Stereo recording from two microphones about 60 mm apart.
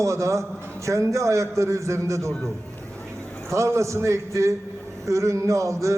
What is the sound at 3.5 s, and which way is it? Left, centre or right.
A man's voice, right.